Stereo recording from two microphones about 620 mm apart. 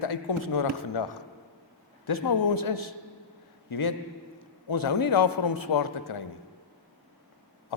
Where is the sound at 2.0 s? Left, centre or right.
Left.